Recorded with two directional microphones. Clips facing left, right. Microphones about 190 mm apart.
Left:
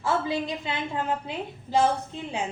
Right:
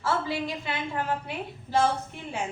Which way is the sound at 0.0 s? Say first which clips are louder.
Left 2 dB; 15° left (ahead or behind).